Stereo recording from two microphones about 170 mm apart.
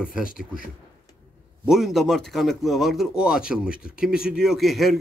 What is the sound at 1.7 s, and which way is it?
Speech, centre (ahead or behind).